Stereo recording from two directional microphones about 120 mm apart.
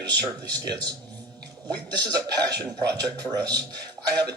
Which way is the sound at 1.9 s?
35° right (ahead or behind).